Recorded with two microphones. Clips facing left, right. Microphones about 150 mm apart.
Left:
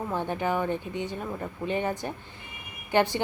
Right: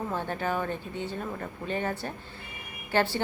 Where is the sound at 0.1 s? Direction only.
15° left (ahead or behind).